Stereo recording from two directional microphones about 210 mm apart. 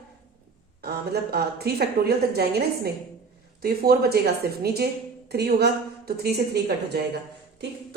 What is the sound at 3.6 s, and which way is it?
A woman's voice, 45° right (ahead or behind).